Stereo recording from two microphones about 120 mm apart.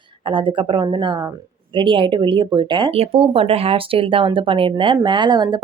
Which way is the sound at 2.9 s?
55° right (ahead or behind).